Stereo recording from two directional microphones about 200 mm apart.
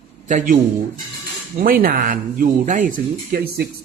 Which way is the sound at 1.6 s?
45° right (ahead or behind).